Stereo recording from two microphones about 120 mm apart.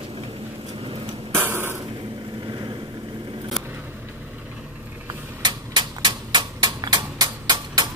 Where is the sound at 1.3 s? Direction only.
15° right (ahead or behind).